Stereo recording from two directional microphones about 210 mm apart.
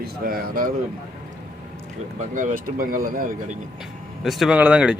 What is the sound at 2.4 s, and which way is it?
Speech, 40° right (ahead or behind).